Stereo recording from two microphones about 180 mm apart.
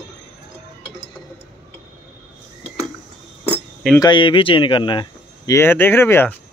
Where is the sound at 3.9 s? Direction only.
25° left (ahead or behind).